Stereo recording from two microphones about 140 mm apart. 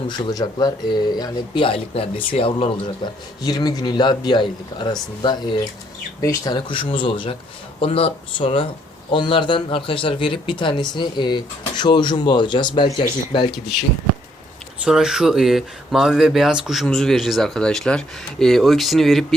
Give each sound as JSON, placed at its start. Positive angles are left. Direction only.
{"t": 0.3, "sound": "speech", "side_deg": 30}
{"t": 14.8, "sound": "speech", "side_deg": -5}